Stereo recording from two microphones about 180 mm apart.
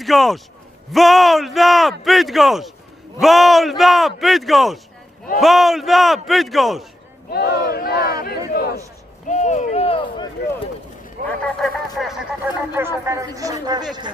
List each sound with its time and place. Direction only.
0.0 s speech: centre (ahead or behind)
7.3 s speech: 60° left (ahead or behind)
9.2 s speech: 40° left (ahead or behind)
11.3 s a man's voice: centre (ahead or behind); by 13.8 s 20° right (ahead or behind)